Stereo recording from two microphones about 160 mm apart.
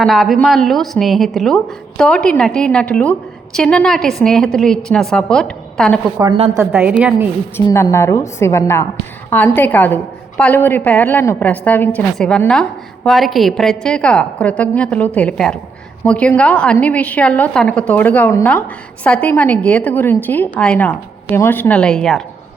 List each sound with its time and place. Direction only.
0.0 s a woman's voice: centre (ahead or behind)
6.5 s a woman's voice: 15° right (ahead or behind)
7.5 s a woman's voice: 15° left (ahead or behind)